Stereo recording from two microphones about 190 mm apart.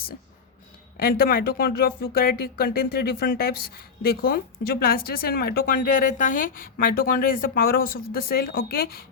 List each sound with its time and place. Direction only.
0.9 s speech: 50° left (ahead or behind)